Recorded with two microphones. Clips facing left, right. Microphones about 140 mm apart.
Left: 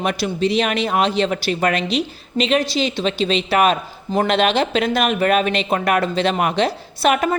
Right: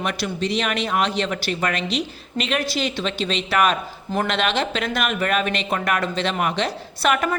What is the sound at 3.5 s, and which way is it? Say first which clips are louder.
Speech: left 1 dB; 40° left (ahead or behind).